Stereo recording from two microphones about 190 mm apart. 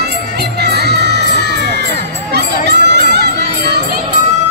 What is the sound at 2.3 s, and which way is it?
Children shouting, 60° right (ahead or behind).